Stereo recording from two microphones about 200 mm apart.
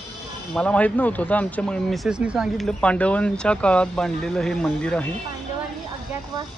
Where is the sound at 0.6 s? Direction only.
5° left (ahead or behind).